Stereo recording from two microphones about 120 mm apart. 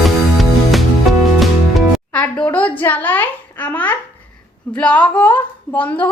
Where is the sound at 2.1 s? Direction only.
10° left (ahead or behind).